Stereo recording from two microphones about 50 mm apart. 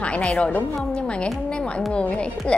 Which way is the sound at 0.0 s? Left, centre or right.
Left.